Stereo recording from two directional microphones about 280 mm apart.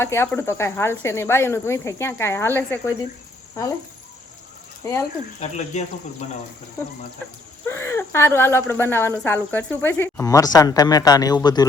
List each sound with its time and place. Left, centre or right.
0.0 s speech: centre
4.8 s speech: centre
5.4 s speech: left
7.7 s speech: centre